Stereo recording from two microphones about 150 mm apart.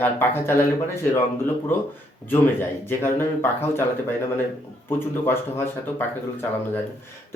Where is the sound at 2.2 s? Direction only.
15° left (ahead or behind).